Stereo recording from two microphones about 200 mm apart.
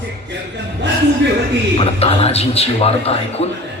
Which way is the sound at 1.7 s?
30° left (ahead or behind).